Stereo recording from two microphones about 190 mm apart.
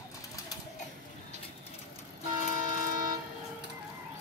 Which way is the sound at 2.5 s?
20° right (ahead or behind).